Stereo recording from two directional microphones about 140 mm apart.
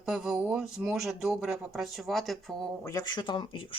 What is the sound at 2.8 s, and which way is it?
Speech, 25° left (ahead or behind).